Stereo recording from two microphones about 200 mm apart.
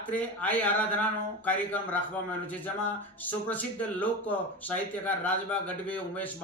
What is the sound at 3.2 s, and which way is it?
Speech, 10° left (ahead or behind).